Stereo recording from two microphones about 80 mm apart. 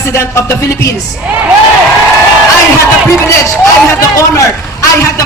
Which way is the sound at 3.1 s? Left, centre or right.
Left.